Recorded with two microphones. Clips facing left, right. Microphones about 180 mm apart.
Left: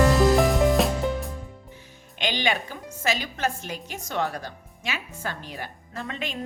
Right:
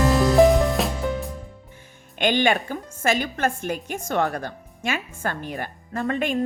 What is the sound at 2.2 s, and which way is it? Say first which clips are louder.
A woman's voice: right 6 dB; 50° right (ahead or behind).